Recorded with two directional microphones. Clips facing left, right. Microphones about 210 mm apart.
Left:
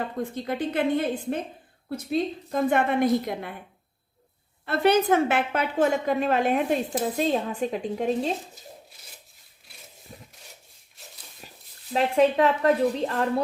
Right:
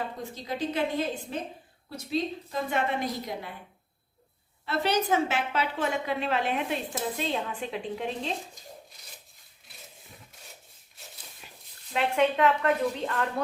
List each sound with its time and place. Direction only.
0.2 s a woman's voice: 55° left (ahead or behind)
4.6 s a woman's voice: 55° left (ahead or behind)
8.6 s speech: 5° left (ahead or behind)
10.1 s rub: 40° left (ahead or behind)
11.4 s a sound: 40° left (ahead or behind)
11.9 s a woman's voice: 35° left (ahead or behind)